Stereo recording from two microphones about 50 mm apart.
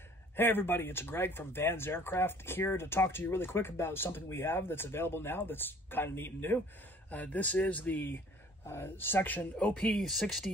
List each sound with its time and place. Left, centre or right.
0.4 s speech: left
7.1 s speech: left
8.6 s speech: left
9.8 s speech: centre